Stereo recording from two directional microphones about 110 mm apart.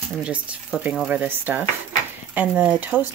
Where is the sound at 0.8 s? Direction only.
15° right (ahead or behind).